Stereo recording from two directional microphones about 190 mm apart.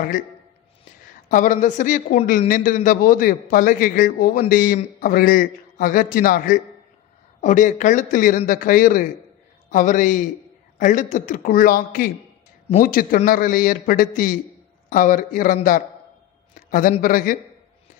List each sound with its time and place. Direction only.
1.3 s a man's voice: 45° left (ahead or behind)
16.5 s a sound: 45° left (ahead or behind)
17.0 s a man's voice: 45° left (ahead or behind)